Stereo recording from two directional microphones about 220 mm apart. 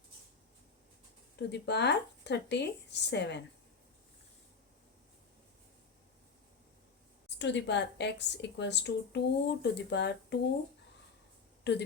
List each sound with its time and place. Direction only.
1.4 s a woman's voice: 50° left (ahead or behind)
7.3 s a woman's voice: 55° left (ahead or behind)
11.7 s a woman's voice: 50° left (ahead or behind)